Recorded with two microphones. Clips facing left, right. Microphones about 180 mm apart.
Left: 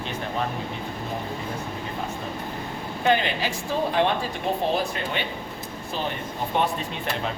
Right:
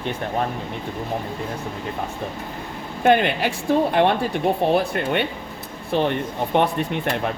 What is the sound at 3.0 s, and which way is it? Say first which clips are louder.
Speech: right 5 dB; 55° right (ahead or behind).